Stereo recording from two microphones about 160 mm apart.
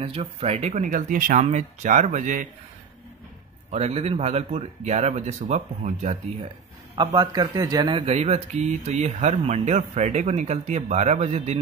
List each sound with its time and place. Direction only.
0.0 s speech: 40° right (ahead or behind); by 1.4 s 60° right (ahead or behind)
1.4 s speech: 45° right (ahead or behind)
3.7 s speech: 40° right (ahead or behind)
7.0 s speech: 30° right (ahead or behind)